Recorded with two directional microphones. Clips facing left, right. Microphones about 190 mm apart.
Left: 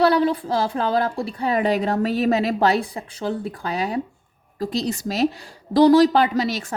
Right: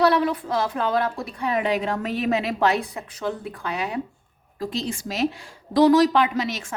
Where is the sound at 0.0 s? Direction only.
30° left (ahead or behind).